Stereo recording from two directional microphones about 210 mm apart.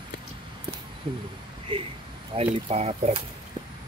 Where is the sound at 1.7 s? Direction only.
25° right (ahead or behind).